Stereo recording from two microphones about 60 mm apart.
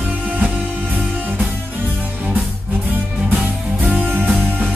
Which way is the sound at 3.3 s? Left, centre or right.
Right.